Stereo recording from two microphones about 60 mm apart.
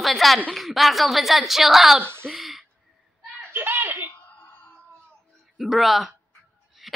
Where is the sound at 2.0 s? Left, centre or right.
Right.